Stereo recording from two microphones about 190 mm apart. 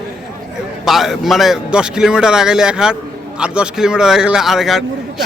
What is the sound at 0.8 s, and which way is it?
Speech, centre (ahead or behind).